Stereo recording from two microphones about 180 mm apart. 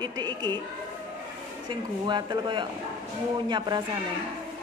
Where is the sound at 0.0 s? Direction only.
25° right (ahead or behind).